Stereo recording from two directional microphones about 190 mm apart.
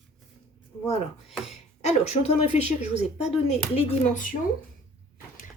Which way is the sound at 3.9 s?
40° left (ahead or behind).